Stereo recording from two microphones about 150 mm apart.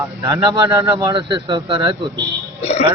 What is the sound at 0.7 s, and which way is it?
Speech, 20° right (ahead or behind).